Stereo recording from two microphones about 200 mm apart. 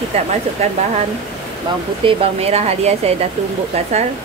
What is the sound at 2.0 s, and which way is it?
Speech, 25° right (ahead or behind).